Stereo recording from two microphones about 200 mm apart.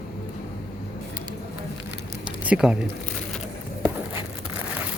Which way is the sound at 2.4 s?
5° right (ahead or behind).